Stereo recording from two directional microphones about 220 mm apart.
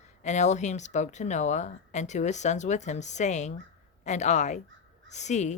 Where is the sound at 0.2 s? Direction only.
30° left (ahead or behind).